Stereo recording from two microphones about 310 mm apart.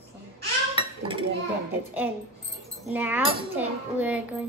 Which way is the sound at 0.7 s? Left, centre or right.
Centre.